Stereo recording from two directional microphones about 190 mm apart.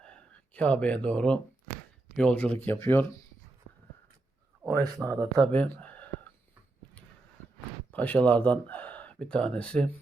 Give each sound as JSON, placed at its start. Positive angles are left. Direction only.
{"t": 0.0, "sound": "a sound", "side_deg": 5}
{"t": 2.1, "sound": "speech", "side_deg": 5}
{"t": 4.8, "sound": "speech", "side_deg": -15}
{"t": 5.2, "sound": "speech", "side_deg": 10}
{"t": 7.9, "sound": "speech", "side_deg": 10}